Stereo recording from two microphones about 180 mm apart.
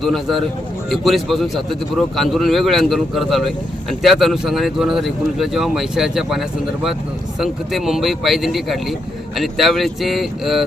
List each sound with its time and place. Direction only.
0.0 s speech: centre (ahead or behind)